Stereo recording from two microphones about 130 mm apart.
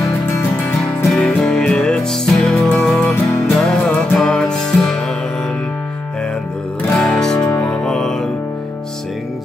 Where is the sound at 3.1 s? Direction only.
20° left (ahead or behind).